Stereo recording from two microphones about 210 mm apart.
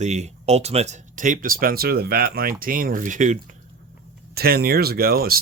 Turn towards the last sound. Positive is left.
turn(degrees=-45)  # may be behind; listen again after turning